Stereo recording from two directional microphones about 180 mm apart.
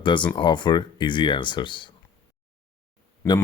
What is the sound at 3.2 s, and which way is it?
Speech, 15° left (ahead or behind).